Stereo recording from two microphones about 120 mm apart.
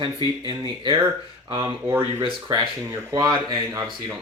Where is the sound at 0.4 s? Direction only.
40° right (ahead or behind).